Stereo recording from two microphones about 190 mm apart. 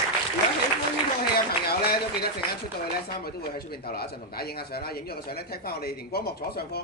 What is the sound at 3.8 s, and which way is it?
Speech, 55° left (ahead or behind).